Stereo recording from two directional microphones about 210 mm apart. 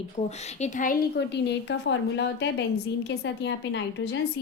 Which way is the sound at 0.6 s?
40° left (ahead or behind).